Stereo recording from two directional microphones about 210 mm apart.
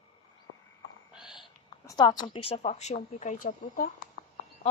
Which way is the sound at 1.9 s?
15° left (ahead or behind).